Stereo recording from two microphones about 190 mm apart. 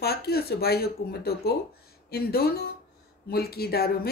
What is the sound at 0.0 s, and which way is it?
Speech, 55° left (ahead or behind).